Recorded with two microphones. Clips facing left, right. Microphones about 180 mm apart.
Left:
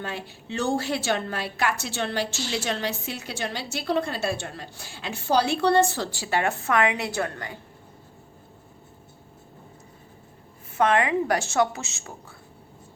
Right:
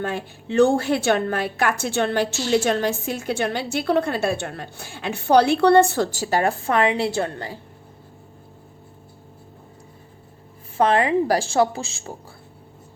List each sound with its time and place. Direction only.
0.0 s a woman's voice: 50° right (ahead or behind)
6.1 s a woman's voice: 40° right (ahead or behind)
10.8 s a woman's voice: 30° right (ahead or behind)